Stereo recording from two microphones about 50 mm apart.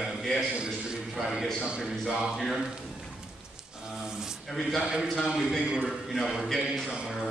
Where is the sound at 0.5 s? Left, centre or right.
Centre.